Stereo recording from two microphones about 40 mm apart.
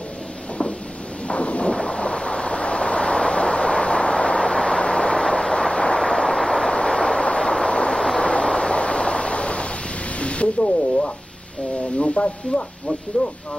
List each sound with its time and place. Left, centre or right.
1.2 s ocean: left
10.1 s a sound: left
12.0 s speech: left